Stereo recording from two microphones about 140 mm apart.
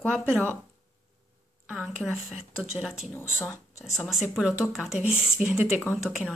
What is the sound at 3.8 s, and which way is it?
A woman's voice, centre (ahead or behind).